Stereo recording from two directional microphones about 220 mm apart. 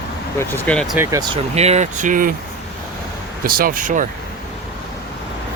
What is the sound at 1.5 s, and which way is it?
Speech, 30° right (ahead or behind).